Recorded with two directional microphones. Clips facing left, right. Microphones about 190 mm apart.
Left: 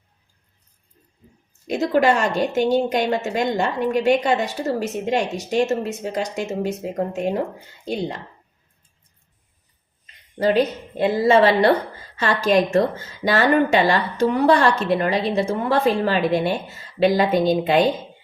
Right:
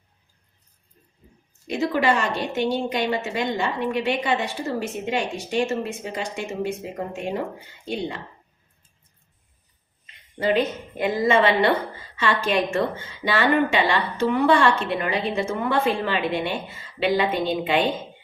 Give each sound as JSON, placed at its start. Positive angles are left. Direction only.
{"t": 1.6, "sound": "a woman's voice", "side_deg": 45}
{"t": 10.3, "sound": "a woman's voice", "side_deg": 40}